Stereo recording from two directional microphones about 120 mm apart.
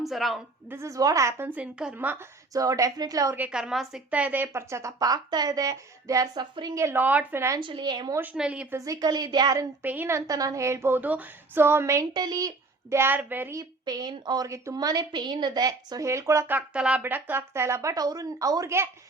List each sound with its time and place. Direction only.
0.0 s a woman's voice: centre (ahead or behind)
0.7 s a woman's voice: 25° right (ahead or behind)
2.5 s a woman's voice: 30° right (ahead or behind)
3.3 s a woman's voice: 10° right (ahead or behind)
7.6 s a woman's voice: 40° right (ahead or behind)
8.1 s a woman's voice: 15° right (ahead or behind)
8.7 s a woman's voice: 30° right (ahead or behind)
9.8 s a woman's voice: 15° right (ahead or behind); by 13.0 s 30° right (ahead or behind)
13.0 s a woman's voice: 15° right (ahead or behind)
13.6 s a woman's voice: 35° right (ahead or behind)
16.6 s a woman's voice: 10° right (ahead or behind); by 18.9 s 25° right (ahead or behind)